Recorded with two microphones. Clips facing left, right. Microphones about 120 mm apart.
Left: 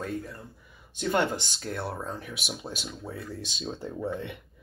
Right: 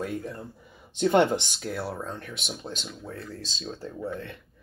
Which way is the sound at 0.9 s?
25° right (ahead or behind).